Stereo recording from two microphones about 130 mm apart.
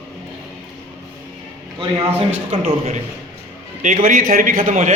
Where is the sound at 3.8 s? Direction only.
80° right.